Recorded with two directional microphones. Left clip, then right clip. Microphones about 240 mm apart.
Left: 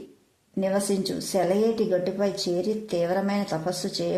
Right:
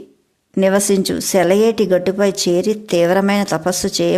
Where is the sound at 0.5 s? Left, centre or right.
Right.